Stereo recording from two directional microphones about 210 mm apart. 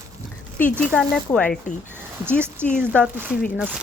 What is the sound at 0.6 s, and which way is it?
Speech, 5° left (ahead or behind).